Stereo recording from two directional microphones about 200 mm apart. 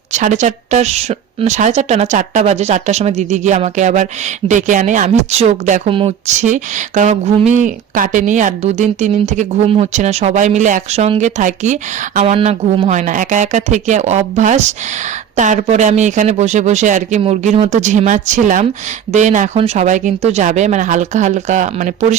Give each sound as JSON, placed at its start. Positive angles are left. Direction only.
{"t": 0.1, "sound": "a woman's voice", "side_deg": -35}